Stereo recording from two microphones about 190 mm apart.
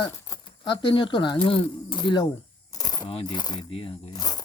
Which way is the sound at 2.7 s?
20° left (ahead or behind).